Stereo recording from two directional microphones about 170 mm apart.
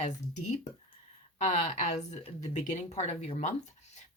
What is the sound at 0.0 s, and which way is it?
Speech, 45° left (ahead or behind).